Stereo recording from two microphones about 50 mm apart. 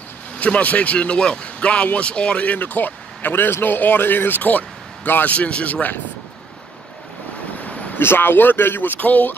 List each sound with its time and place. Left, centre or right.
0.4 s a man's voice: left
7.5 s a sound: left
8.0 s speech: left